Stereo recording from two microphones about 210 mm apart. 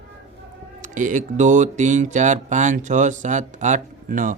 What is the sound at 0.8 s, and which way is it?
Speech, 40° right (ahead or behind).